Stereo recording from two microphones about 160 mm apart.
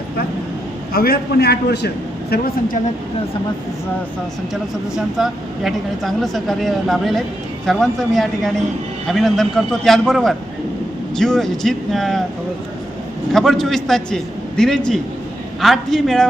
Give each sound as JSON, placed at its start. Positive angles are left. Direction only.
{"t": 0.9, "sound": "a man's voice", "side_deg": 75}
{"t": 2.3, "sound": "a woman's voice", "side_deg": 60}
{"t": 5.1, "sound": "speech", "side_deg": 0}
{"t": 13.3, "sound": "speech", "side_deg": 0}